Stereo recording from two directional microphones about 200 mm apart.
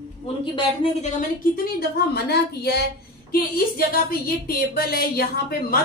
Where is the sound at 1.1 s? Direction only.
45° left (ahead or behind).